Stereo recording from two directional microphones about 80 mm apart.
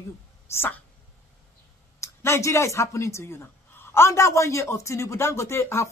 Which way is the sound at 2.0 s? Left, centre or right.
Left.